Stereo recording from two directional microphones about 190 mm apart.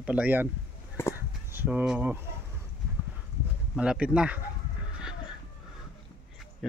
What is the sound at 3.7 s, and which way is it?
Speech, 5° right (ahead or behind).